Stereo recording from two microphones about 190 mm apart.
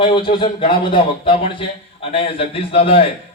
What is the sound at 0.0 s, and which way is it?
Speech, 25° left (ahead or behind).